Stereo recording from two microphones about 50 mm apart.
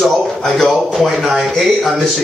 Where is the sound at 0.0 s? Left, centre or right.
Centre.